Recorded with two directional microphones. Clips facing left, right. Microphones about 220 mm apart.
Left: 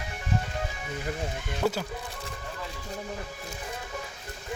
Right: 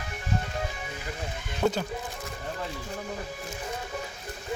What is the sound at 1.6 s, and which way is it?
Speech, 5° left (ahead or behind).